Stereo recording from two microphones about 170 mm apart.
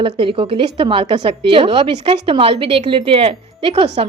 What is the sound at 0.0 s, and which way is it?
A woman's voice, 30° right (ahead or behind).